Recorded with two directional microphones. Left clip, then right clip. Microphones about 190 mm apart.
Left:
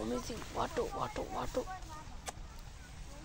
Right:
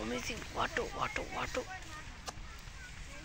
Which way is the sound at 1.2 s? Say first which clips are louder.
Even; 30° left (ahead or behind).